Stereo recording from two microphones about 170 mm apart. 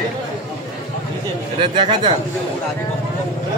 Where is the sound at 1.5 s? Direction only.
30° right (ahead or behind).